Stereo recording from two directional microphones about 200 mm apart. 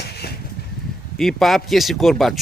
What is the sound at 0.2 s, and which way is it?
Dishes, 50° left (ahead or behind).